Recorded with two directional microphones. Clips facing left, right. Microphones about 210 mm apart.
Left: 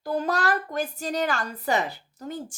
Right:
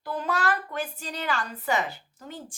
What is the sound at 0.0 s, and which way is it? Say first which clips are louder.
A woman's voice: left 3 dB; 40° left (ahead or behind).